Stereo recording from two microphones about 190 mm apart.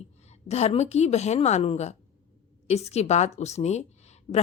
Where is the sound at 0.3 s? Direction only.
35° left (ahead or behind).